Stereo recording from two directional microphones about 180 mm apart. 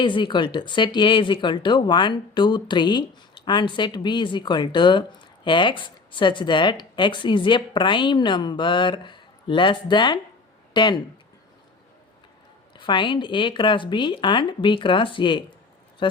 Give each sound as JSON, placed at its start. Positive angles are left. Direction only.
{"t": 0.0, "sound": "speech", "side_deg": 25}
{"t": 12.7, "sound": "speech", "side_deg": 25}